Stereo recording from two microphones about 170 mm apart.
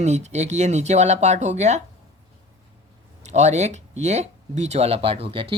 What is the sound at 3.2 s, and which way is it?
Speech, 40° right (ahead or behind).